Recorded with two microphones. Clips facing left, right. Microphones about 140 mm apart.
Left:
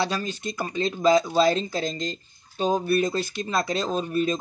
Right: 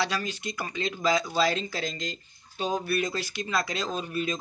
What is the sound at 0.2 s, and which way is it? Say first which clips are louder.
Speech: left 4 dB; 35° left (ahead or behind).